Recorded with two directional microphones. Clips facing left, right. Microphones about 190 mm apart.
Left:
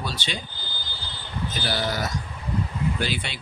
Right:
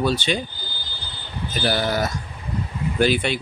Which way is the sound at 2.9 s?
50° right (ahead or behind).